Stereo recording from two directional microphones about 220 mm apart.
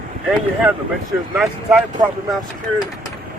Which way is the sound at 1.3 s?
5° right (ahead or behind).